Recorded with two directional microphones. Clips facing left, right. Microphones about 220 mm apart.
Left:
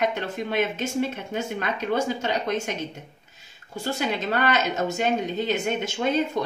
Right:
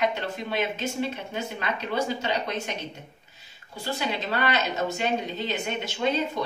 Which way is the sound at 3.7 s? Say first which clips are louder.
Left 3 dB; 45° left (ahead or behind).